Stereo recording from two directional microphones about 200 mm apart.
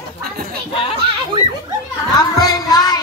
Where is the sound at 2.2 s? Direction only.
20° left (ahead or behind).